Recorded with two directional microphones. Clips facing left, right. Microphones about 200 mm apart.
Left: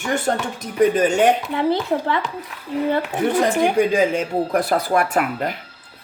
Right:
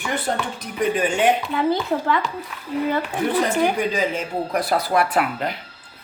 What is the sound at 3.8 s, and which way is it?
Speech, 50° left (ahead or behind).